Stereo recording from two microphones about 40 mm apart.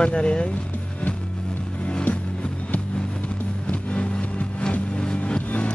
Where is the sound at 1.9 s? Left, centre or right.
Left.